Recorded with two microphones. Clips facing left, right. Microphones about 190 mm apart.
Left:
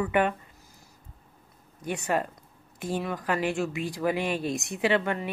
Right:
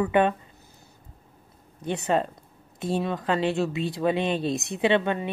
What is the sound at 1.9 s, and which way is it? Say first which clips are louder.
Speech: right 3 dB; 25° right (ahead or behind).